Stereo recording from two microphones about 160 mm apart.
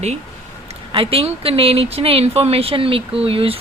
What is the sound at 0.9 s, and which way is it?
Speech, 35° right (ahead or behind).